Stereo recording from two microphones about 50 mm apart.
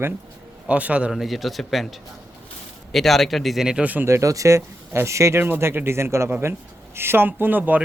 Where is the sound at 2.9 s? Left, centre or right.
Centre.